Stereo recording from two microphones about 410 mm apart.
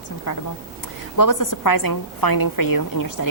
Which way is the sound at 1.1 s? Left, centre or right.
Left.